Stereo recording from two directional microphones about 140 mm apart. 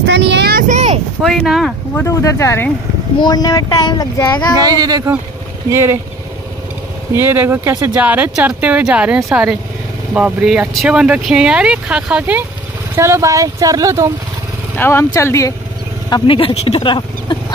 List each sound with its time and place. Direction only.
0.5 s a sound: 90° right
1.2 s speech: centre (ahead or behind)
2.0 s speech: 20° left (ahead or behind)
3.2 s speech: 30° left (ahead or behind)
4.6 s speech: 30° right (ahead or behind)
7.2 s speech: 15° right (ahead or behind)
14.8 s speech: 15° left (ahead or behind)
16.1 s speech: 40° left (ahead or behind)